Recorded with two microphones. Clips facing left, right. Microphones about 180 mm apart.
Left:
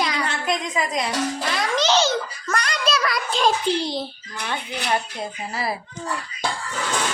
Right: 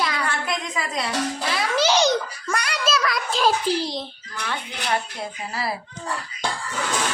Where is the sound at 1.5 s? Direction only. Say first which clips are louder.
Even; 10° right (ahead or behind).